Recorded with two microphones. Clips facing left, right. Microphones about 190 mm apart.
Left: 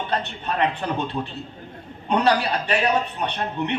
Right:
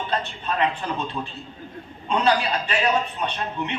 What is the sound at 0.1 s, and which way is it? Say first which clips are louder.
A man's voice: left 1 dB; 60° left (ahead or behind).